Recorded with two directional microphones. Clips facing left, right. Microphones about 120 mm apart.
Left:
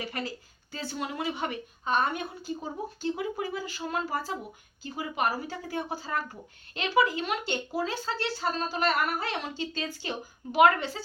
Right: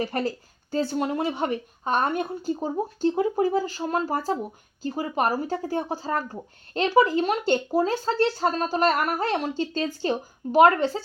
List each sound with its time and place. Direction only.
0.0 s speech: 45° right (ahead or behind)